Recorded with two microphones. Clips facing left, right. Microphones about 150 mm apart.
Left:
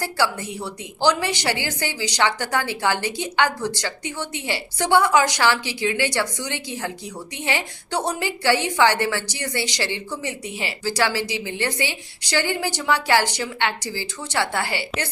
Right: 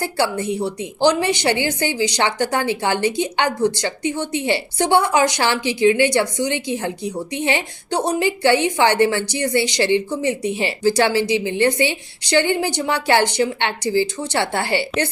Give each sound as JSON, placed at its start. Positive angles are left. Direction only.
{"t": 0.0, "sound": "a woman's voice", "side_deg": -20}